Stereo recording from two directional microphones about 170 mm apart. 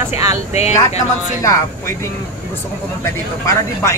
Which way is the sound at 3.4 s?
15° left (ahead or behind).